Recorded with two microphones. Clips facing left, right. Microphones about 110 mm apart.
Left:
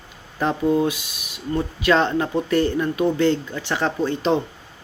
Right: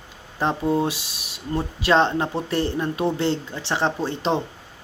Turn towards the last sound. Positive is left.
turn(degrees=-25)  # may be behind; listen again after turning